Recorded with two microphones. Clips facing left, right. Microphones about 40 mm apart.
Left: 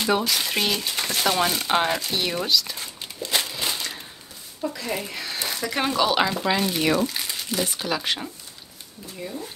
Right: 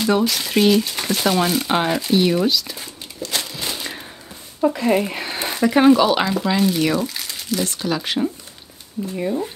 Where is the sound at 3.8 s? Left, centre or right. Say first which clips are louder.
Right 3 dB; right.